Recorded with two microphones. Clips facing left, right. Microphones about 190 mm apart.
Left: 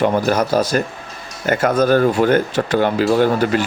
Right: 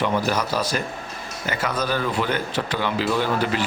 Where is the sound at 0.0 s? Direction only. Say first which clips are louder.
Left 6 dB; 50° left (ahead or behind).